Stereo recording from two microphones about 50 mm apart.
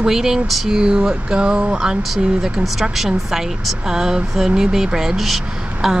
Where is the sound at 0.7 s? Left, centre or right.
Centre.